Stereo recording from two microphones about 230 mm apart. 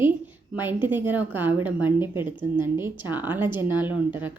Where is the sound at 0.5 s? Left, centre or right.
Centre.